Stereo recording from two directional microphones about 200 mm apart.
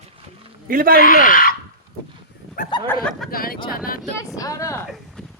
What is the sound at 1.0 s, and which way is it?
Speech, 45° left (ahead or behind).